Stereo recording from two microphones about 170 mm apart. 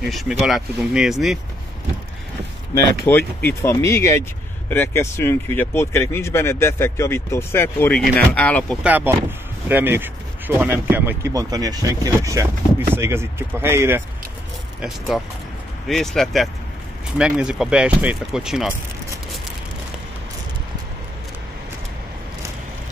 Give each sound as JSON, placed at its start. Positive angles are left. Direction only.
{"t": 0.0, "sound": "speech", "side_deg": 0}
{"t": 2.7, "sound": "speech", "side_deg": 10}
{"t": 8.8, "sound": "speech", "side_deg": -10}
{"t": 14.8, "sound": "speech", "side_deg": 0}